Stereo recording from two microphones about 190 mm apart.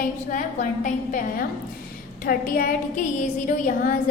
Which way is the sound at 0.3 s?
45° left (ahead or behind).